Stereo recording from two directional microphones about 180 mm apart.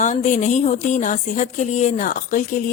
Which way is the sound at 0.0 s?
40° left (ahead or behind).